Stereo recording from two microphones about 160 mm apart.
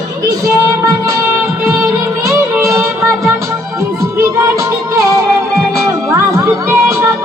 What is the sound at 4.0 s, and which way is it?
Music, 20° right (ahead or behind).